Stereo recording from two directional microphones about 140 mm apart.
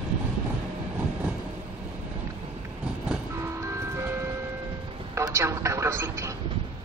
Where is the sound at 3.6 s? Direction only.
15° right (ahead or behind).